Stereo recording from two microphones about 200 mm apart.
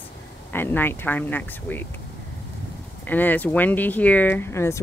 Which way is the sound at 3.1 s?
10° left (ahead or behind).